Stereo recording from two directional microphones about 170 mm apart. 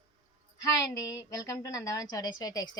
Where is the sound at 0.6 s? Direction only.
20° left (ahead or behind).